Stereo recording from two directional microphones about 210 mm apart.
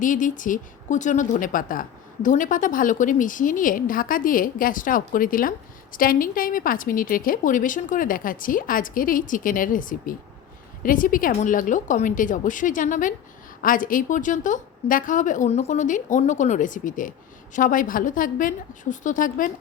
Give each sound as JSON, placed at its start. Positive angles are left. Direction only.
{"t": 0.0, "sound": "a woman's voice", "side_deg": 40}